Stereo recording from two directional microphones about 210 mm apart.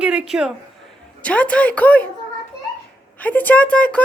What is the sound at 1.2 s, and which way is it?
Speech, 5° left (ahead or behind).